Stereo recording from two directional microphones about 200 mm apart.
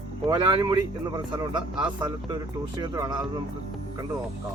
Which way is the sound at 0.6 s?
20° right (ahead or behind).